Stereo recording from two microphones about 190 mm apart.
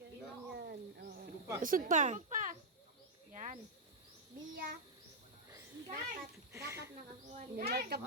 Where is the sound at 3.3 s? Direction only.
40° right (ahead or behind).